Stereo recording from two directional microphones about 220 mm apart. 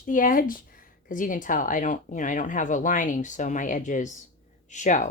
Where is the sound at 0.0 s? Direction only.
40° left (ahead or behind).